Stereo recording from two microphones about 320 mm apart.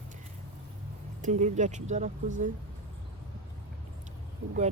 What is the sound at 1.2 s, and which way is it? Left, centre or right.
Speech, right.